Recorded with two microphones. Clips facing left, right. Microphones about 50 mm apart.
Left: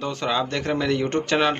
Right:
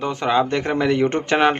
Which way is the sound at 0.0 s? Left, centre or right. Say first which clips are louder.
Right 5 dB; centre.